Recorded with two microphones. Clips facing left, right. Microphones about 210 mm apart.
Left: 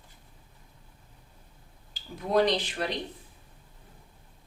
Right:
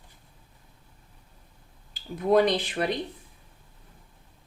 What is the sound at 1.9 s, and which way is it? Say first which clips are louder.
Speech: right 5 dB; 55° right (ahead or behind).